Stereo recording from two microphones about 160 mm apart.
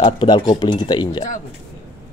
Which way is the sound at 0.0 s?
30° left (ahead or behind).